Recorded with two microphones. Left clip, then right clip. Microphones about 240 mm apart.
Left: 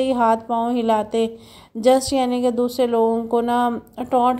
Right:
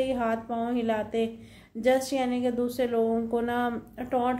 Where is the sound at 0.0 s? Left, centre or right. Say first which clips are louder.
Left 10 dB; left.